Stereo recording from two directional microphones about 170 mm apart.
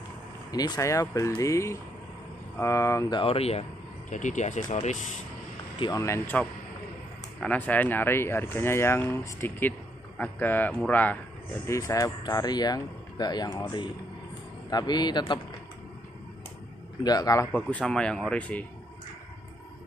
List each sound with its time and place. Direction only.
0.5 s speech: 20° left (ahead or behind)
3.2 s speech: 35° left (ahead or behind)
5.8 s speech: 20° left (ahead or behind)
17.0 s speech: 25° left (ahead or behind)
17.5 s speech: 10° left (ahead or behind)